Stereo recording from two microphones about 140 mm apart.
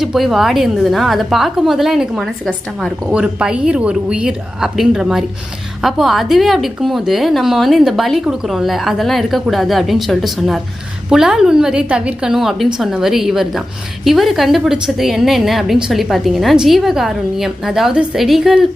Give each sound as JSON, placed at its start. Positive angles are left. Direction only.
{"t": 0.0, "sound": "a woman's voice", "side_deg": 0}